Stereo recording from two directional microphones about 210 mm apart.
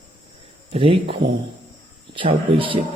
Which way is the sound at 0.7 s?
25° right (ahead or behind).